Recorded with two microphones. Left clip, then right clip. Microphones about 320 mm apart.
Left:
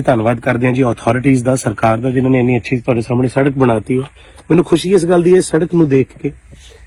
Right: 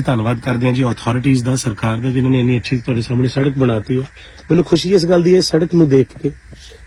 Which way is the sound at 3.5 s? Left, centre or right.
Left.